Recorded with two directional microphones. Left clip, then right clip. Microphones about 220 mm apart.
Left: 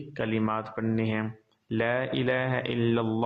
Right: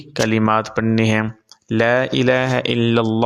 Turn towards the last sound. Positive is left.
turn(degrees=-40)  # may be behind; listen again after turning